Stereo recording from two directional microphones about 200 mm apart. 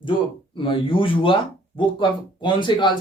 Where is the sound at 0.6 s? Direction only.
25° left (ahead or behind).